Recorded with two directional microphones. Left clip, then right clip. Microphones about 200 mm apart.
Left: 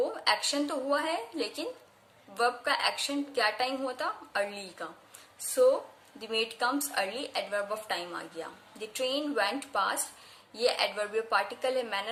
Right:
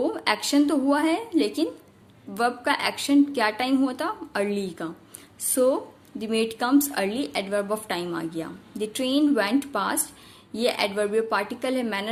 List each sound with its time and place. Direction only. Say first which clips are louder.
0.0 s a woman's voice: right 4 dB; 40° right (ahead or behind)